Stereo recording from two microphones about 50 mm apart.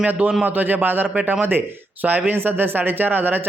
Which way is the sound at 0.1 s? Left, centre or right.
Right.